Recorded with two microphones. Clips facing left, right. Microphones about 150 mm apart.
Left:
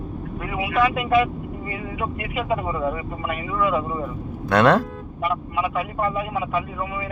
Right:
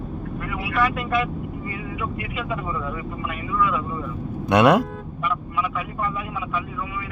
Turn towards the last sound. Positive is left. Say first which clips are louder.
# left 4 dB
turn(degrees=45)  # may be behind; listen again after turning